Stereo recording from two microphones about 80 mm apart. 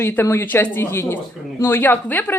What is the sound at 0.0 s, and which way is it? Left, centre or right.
A woman's voice, left.